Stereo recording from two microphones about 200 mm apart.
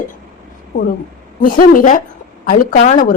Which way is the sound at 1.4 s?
45° left (ahead or behind).